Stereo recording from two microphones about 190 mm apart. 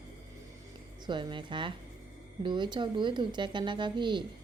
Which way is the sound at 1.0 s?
25° right (ahead or behind).